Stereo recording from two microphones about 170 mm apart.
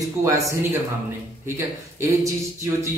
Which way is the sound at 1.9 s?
15° right (ahead or behind).